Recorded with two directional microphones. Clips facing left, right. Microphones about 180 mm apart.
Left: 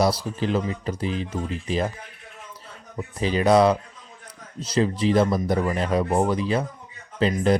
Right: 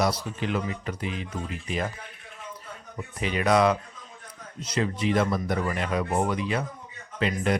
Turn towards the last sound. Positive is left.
turn(degrees=30)  # may be behind; listen again after turning